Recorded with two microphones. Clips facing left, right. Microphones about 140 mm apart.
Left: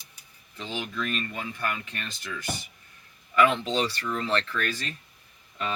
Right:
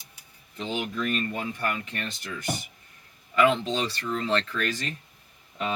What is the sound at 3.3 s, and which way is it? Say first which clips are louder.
Speech: even; 25° right (ahead or behind).